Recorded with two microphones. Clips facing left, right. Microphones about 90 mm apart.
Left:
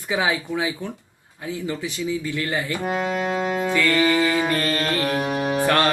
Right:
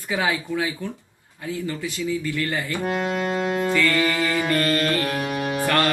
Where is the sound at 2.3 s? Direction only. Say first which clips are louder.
Even; 20° left (ahead or behind).